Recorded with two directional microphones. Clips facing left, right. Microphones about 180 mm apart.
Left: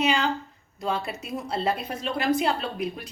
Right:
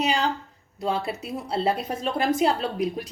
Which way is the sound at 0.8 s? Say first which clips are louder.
Right 2 dB; 35° right (ahead or behind).